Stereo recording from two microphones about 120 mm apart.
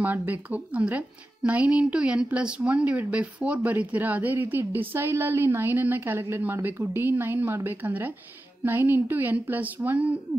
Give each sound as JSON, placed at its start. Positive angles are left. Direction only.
{"t": 0.0, "sound": "a woman's voice", "side_deg": -15}